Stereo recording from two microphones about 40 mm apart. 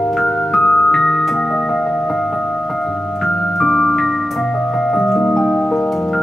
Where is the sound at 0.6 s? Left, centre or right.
Left.